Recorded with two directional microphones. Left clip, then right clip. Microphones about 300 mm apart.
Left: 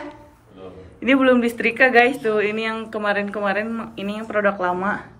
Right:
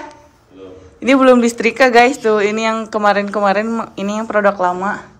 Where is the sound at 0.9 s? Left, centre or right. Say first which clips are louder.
Right 6 dB; centre.